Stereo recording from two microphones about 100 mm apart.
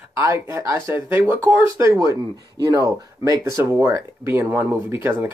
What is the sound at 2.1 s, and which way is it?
Speech, 40° right (ahead or behind).